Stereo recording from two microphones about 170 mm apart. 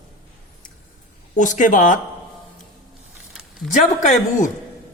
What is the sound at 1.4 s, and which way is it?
Speech, 50° left (ahead or behind).